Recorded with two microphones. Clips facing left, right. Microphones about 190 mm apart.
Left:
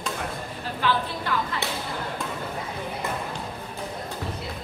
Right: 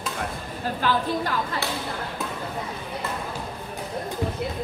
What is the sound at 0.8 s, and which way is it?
Speech, 45° right (ahead or behind).